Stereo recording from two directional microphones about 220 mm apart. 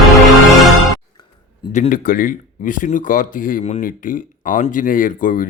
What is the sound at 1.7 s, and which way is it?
Speech, 35° left (ahead or behind).